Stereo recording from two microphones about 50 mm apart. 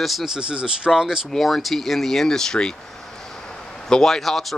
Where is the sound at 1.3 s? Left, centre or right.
Centre.